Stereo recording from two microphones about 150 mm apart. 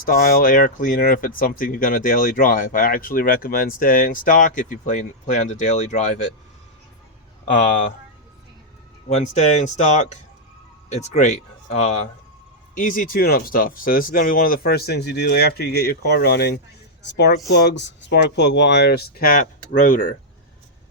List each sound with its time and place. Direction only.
0.0 s speech: 70° left (ahead or behind); by 6.1 s 50° left (ahead or behind)
7.4 s speech: 55° left (ahead or behind)
9.0 s speech: 50° left (ahead or behind)
12.7 s speech: 65° left (ahead or behind)